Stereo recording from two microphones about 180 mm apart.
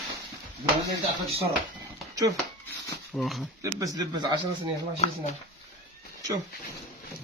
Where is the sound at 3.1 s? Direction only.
Centre (ahead or behind).